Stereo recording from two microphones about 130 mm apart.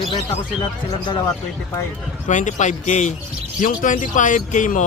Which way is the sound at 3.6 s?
85° left.